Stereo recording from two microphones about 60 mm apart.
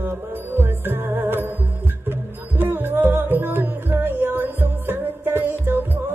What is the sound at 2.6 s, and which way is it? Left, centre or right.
Music, right.